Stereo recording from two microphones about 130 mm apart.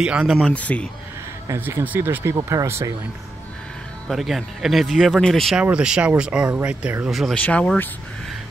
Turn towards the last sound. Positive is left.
turn(degrees=10)  # may be behind; listen again after turning